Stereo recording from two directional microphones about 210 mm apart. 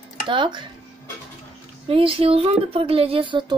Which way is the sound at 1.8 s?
25° right (ahead or behind).